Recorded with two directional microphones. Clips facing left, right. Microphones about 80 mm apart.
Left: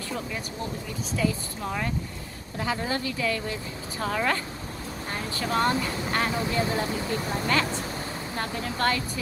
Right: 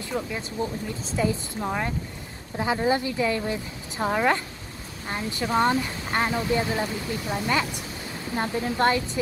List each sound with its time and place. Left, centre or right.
1.1 s speech: right
7.2 s speech: centre
8.4 s speech: right